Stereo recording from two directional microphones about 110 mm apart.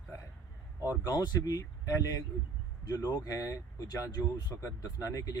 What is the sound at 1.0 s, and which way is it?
Speech, 35° left (ahead or behind).